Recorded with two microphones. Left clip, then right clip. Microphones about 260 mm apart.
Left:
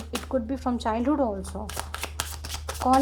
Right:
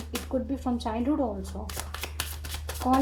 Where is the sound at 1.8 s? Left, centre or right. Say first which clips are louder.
Left 3 dB; left.